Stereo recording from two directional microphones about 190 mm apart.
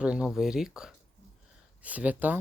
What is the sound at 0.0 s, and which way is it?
Speech, 5° right (ahead or behind).